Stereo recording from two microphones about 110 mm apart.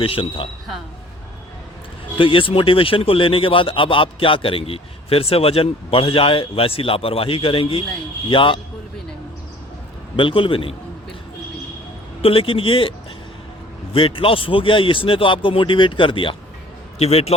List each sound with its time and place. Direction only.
0.0 s a man's voice: 55° left (ahead or behind)
2.1 s a man's voice: 50° left (ahead or behind)
10.2 s speech: 50° left (ahead or behind)
12.2 s a man's voice: 55° left (ahead or behind)
13.9 s speech: 55° left (ahead or behind)
17.0 s speech: 65° left (ahead or behind)